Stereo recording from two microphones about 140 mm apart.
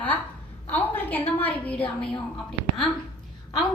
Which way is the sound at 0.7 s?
15° left (ahead or behind).